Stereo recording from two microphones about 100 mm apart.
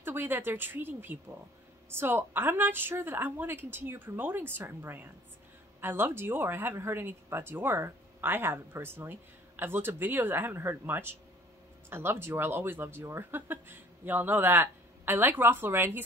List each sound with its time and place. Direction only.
0.0 s speech: 20° right (ahead or behind)